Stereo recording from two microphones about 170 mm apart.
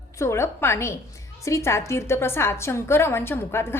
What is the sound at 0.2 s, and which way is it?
A woman's voice, 15° left (ahead or behind).